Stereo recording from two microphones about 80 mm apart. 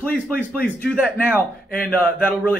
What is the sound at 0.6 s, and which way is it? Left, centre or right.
Speech, centre.